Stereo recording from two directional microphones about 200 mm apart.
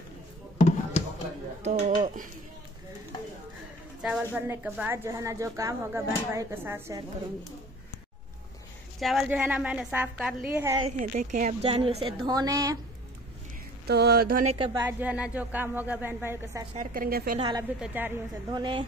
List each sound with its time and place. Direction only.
0.6 s music: 35° left (ahead or behind)
1.6 s a sound: 35° right (ahead or behind)
4.0 s speech: 5° right (ahead or behind)
9.0 s a woman's voice: centre (ahead or behind)
11.0 s a woman's voice: 40° right (ahead or behind); by 12.7 s 20° right (ahead or behind)
13.8 s a woman's voice: 55° right (ahead or behind)
14.5 s a woman's voice: 25° right (ahead or behind)
14.8 s speech: 10° right (ahead or behind)
16.7 s a woman's voice: 45° right (ahead or behind)
17.4 s a woman's voice: 20° right (ahead or behind)
17.7 s speech: 5° right (ahead or behind)
18.5 s a woman's voice: 25° right (ahead or behind)